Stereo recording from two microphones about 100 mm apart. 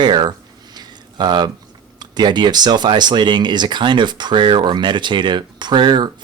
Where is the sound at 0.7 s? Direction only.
45° right (ahead or behind).